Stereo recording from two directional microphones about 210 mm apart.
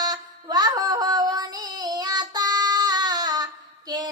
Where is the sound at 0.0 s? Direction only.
20° right (ahead or behind).